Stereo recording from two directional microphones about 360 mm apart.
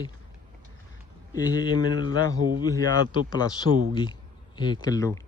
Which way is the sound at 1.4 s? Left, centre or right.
Centre.